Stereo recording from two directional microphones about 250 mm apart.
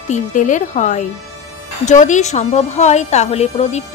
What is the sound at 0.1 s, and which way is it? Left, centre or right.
A woman's voice, left.